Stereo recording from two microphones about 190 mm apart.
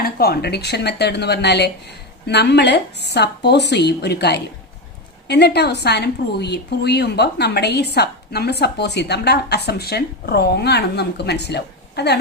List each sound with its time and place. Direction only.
0.0 s a woman's voice: 55° left (ahead or behind)